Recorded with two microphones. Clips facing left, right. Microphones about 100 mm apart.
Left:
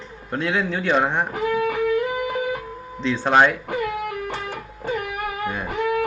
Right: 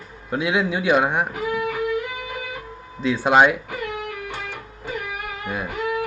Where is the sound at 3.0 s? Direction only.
10° right (ahead or behind).